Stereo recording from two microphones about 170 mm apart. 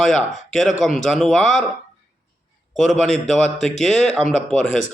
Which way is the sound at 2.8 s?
Centre (ahead or behind).